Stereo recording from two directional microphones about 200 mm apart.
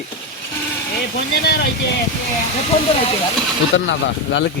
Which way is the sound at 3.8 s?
65° left (ahead or behind).